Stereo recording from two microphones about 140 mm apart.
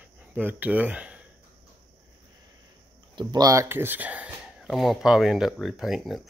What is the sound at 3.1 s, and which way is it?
Speech, 30° right (ahead or behind).